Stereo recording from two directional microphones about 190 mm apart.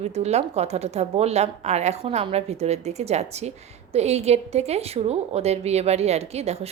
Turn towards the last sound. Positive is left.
turn(degrees=-35)  # may be behind; listen again after turning